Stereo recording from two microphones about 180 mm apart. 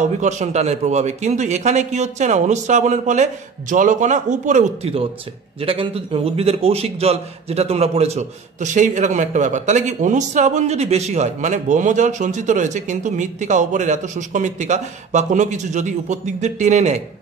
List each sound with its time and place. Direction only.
0.2 s a man's voice: 40° right (ahead or behind)